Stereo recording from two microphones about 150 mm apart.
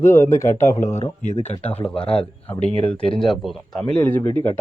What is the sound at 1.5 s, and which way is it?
Speech, 40° left (ahead or behind).